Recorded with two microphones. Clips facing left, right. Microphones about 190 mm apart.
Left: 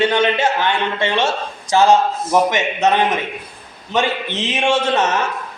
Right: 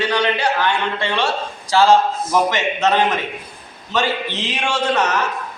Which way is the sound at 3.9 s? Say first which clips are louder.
Left 1 dB; 20° left (ahead or behind).